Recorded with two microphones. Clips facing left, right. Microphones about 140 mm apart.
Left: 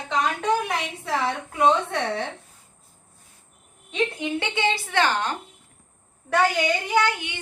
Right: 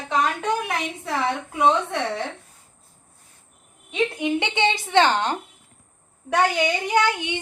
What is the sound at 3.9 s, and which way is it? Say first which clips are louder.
Speech: right 3 dB; 10° right (ahead or behind).